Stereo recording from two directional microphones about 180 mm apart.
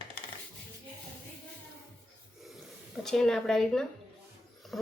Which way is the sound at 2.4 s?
Centre (ahead or behind).